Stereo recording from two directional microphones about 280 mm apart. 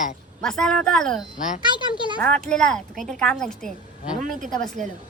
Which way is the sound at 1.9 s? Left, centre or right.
Centre.